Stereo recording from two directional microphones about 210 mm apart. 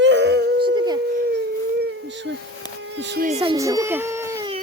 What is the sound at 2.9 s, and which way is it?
Speech, 55° right (ahead or behind).